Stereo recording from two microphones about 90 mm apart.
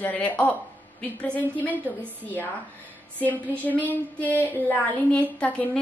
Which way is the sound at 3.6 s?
20° left (ahead or behind).